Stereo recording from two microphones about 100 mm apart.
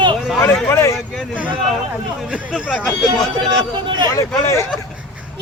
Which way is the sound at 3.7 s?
45° right (ahead or behind).